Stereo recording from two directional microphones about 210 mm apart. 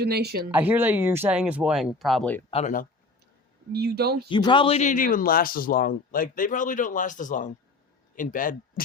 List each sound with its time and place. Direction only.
0.0 s speech: 50° right (ahead or behind)
0.5 s speech: 10° right (ahead or behind)
2.5 s speech: 30° left (ahead or behind)
3.7 s speech: 50° right (ahead or behind)
4.3 s a man's voice: 20° left (ahead or behind); by 8.8 s 40° left (ahead or behind)